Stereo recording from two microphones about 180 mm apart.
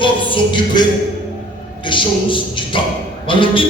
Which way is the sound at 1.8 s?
30° left (ahead or behind).